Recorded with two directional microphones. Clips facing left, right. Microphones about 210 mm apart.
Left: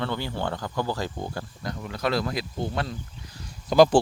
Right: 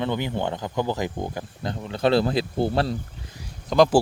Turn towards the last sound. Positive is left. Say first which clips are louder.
# even
turn(degrees=5)  # may be behind; listen again after turning